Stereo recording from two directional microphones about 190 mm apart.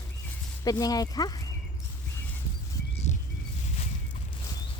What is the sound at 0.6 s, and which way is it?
Speech, 20° left (ahead or behind).